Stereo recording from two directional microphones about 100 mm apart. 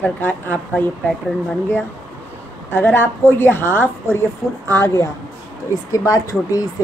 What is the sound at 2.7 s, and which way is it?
A woman's voice, 20° left (ahead or behind).